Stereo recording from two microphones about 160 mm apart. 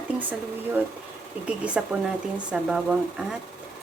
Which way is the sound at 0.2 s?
10° right (ahead or behind).